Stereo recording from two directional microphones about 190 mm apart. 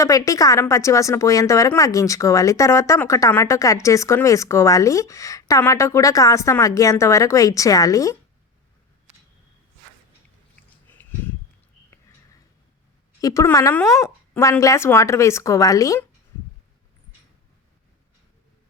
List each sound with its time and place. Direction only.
0.0 s a woman's voice: 15° left (ahead or behind)
10.9 s a sound: 10° left (ahead or behind)
13.2 s a woman's voice: 15° left (ahead or behind)